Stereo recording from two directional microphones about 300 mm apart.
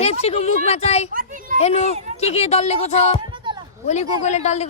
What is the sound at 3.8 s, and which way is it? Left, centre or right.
Speech, left.